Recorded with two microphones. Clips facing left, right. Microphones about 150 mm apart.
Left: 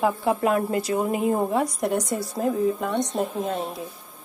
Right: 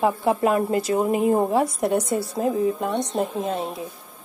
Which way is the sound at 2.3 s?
5° right (ahead or behind).